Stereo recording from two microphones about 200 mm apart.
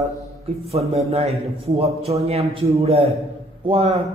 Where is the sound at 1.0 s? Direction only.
30° right (ahead or behind).